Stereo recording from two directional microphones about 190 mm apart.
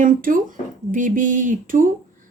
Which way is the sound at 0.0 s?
45° right (ahead or behind).